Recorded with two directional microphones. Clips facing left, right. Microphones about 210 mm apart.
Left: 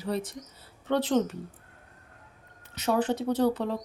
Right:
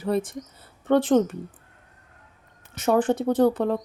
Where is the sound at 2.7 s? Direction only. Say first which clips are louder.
Right 5 dB; 50° right (ahead or behind).